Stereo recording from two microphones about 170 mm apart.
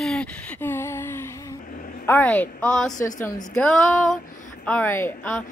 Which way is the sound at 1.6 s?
55° left (ahead or behind).